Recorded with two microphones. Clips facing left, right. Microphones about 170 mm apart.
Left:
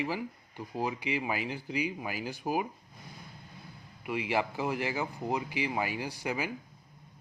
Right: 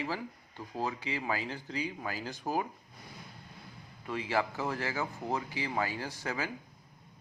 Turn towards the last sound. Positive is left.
turn(degrees=15)  # may be behind; listen again after turning